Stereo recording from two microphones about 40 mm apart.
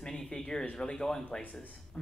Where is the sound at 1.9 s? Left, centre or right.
Left.